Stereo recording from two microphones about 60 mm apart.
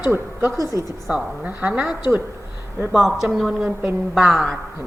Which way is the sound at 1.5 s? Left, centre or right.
Right.